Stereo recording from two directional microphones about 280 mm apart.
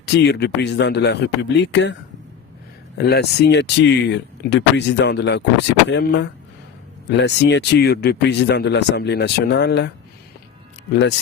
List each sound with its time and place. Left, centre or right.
0.0 s speech: left
3.0 s speech: left